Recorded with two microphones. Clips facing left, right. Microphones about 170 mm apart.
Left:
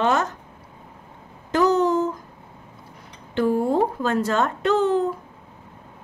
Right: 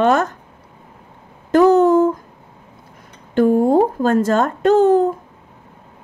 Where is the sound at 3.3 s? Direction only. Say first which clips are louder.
Right 7 dB; 50° right (ahead or behind).